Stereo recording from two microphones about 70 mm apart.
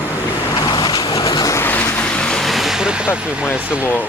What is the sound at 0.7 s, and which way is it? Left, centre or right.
Vehicle, left.